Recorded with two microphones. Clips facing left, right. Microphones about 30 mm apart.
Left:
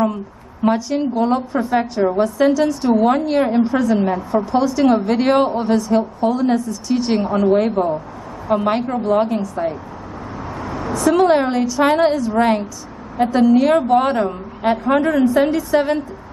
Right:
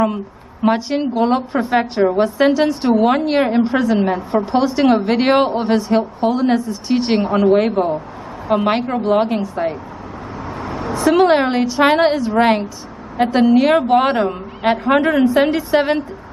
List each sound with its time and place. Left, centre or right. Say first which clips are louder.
0.7 s a woman's voice: right 1 dB; right
7.2 s a woman's voice: right 2 dB; right
7.5 s a woman's voice: right 1 dB; right
10.6 s a woman's voice: right 1 dB; right
15.0 s a woman's voice: right 1 dB; right